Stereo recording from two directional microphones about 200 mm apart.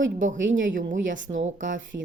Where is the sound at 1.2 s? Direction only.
70° right (ahead or behind).